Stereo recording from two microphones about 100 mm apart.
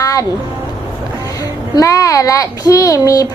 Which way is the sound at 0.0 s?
35° left (ahead or behind).